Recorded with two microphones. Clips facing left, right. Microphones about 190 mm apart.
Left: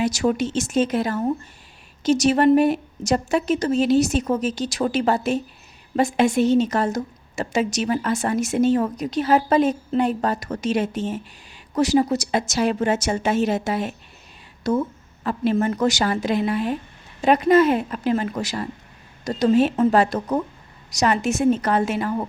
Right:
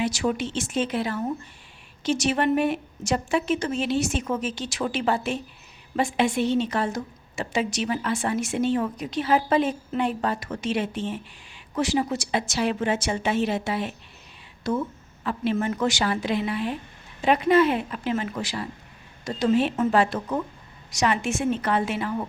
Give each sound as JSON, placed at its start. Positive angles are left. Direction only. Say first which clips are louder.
{"t": 0.0, "sound": "a woman's voice", "louder": "left 4 dB", "side_deg": 40}